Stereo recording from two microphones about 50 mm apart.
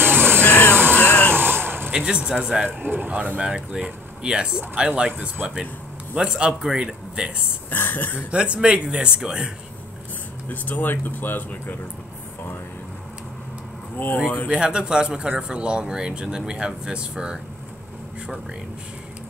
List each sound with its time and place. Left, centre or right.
0.0 s a sound: right
0.4 s a sound: left
1.3 s a sound: right
1.9 s speech: centre
2.6 s speech: right
3.1 s speech: right
7.7 s speech: left
8.3 s speech: right
10.5 s speech: left
13.9 s speech: left
14.5 s speech: centre